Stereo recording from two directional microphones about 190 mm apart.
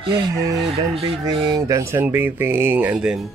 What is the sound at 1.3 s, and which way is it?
Speech, 20° right (ahead or behind).